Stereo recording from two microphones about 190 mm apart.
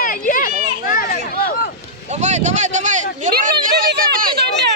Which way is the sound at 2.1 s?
40° right (ahead or behind).